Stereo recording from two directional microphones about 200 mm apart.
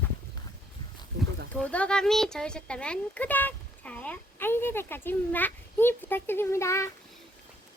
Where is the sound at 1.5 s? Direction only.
5° left (ahead or behind).